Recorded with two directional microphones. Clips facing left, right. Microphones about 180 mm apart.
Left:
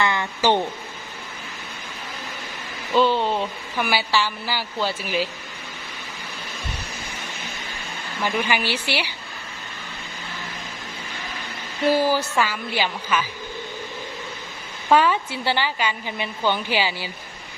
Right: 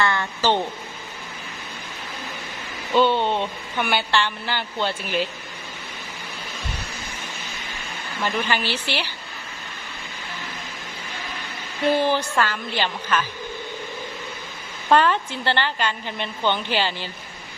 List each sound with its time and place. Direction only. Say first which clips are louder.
0.0 s a woman's voice: left 1 dB; 15° left (ahead or behind)
2.9 s speech: even; centre (ahead or behind)
8.2 s a woman's voice: left 1 dB; 10° left (ahead or behind)
11.9 s a woman's voice: left 1 dB; 5° left (ahead or behind)
14.8 s a woman's voice: even; 5° left (ahead or behind)